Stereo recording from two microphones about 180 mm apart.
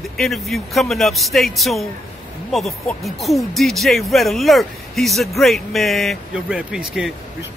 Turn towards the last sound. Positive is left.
turn(degrees=-5)  # may be behind; listen again after turning